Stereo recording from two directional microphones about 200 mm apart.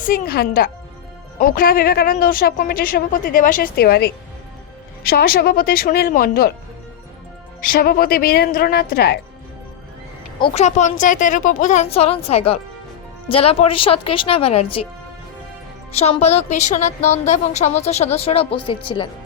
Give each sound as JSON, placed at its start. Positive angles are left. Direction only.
{"t": 0.0, "sound": "speech", "side_deg": 45}
{"t": 7.7, "sound": "speech", "side_deg": 45}
{"t": 10.3, "sound": "a woman's voice", "side_deg": 30}
{"t": 15.9, "sound": "a woman's voice", "side_deg": 30}